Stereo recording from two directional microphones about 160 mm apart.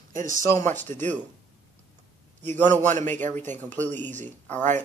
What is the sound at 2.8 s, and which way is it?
Speech, 50° right (ahead or behind).